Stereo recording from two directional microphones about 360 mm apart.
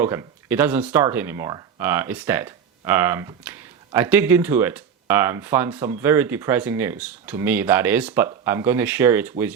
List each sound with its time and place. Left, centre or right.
0.0 s speech: centre